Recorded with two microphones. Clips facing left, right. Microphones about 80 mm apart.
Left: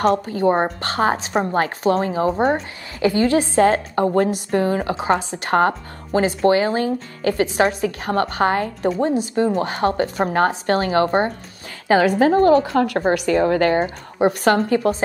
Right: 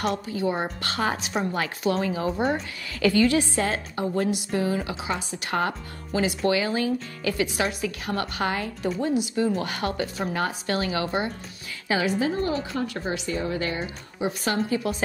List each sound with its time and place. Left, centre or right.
0.0 s a woman's voice: left
3.0 s a woman's voice: left
12.2 s a woman's voice: left